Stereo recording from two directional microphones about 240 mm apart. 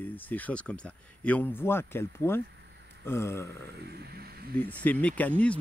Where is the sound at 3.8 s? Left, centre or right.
Right.